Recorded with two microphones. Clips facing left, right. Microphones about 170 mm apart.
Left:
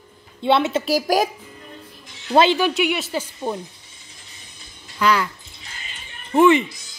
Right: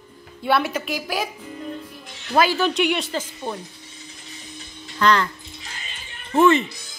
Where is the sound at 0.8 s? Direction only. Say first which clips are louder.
Left 8 dB; 40° left (ahead or behind).